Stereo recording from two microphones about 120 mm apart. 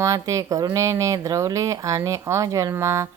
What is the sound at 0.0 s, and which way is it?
Speech, 25° right (ahead or behind).